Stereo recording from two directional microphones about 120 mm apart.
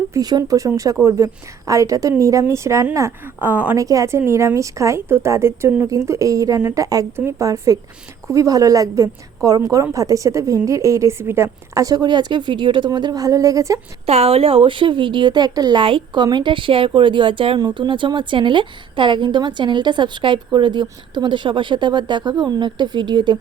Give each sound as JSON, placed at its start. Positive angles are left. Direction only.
{"t": 0.1, "sound": "a woman's voice", "side_deg": -35}
{"t": 3.8, "sound": "a woman's voice", "side_deg": -25}
{"t": 14.1, "sound": "a woman's voice", "side_deg": -60}